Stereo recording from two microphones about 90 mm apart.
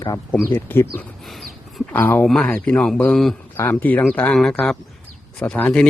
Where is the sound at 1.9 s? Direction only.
20° left (ahead or behind).